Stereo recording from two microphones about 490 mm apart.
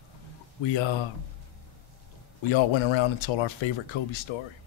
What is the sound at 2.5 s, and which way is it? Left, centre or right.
Speech, left.